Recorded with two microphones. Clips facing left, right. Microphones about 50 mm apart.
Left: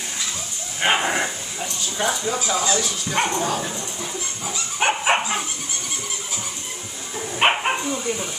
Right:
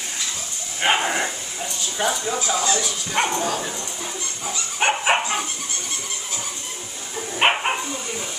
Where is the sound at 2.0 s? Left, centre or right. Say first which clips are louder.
Even; centre.